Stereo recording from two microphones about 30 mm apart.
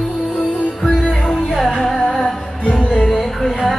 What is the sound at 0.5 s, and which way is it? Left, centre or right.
Music, left.